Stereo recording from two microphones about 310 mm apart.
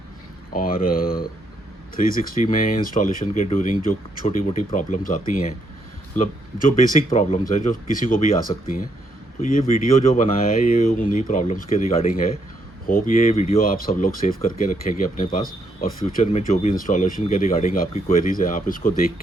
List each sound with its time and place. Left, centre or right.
0.5 s speech: left
7.9 s speech: centre
8.5 s speech: centre